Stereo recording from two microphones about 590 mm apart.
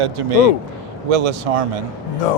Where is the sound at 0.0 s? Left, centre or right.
Right.